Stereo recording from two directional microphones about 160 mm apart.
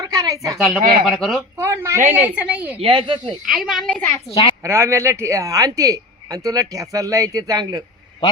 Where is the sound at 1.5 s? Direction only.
20° right (ahead or behind).